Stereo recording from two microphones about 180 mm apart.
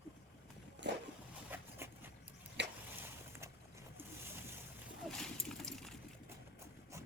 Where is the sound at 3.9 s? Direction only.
10° right (ahead or behind).